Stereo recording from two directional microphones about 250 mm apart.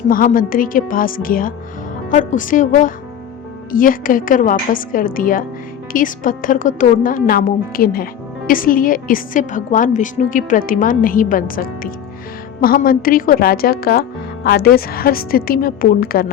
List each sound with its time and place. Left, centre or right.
0.1 s a woman's voice: left